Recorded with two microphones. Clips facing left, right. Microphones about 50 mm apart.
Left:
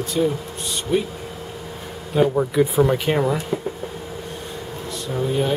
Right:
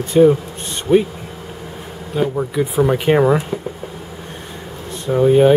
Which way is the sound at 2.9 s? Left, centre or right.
Right.